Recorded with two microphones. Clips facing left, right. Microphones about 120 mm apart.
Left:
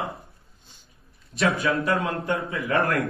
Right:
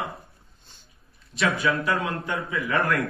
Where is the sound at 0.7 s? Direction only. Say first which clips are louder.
Even; 10° left (ahead or behind).